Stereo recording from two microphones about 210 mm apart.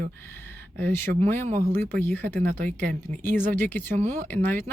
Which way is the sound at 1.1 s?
30° right (ahead or behind).